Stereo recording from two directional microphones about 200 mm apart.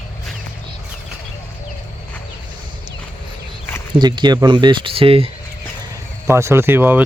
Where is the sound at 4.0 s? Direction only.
20° right (ahead or behind).